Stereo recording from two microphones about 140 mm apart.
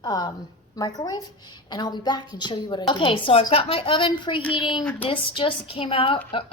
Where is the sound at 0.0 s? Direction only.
30° left (ahead or behind).